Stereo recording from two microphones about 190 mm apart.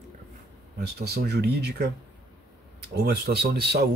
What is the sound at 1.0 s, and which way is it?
Speech, 60° right (ahead or behind).